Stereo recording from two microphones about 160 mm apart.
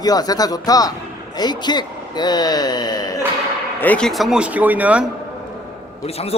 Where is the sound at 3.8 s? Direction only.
5° left (ahead or behind); by 5.1 s 10° right (ahead or behind).